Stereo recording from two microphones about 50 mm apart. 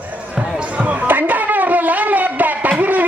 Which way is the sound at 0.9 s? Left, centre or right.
Right.